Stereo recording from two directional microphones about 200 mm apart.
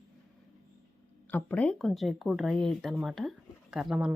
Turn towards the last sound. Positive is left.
turn(degrees=-5)  # may be behind; listen again after turning